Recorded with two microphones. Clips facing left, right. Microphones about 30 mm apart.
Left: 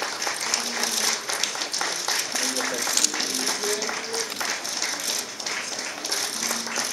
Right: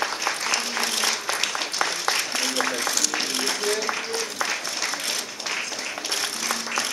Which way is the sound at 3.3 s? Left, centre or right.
Right.